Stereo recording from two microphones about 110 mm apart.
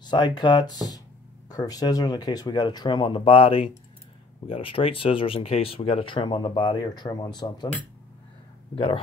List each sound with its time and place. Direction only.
0.0 s speech: 45° left (ahead or behind)
8.7 s speech: 55° left (ahead or behind)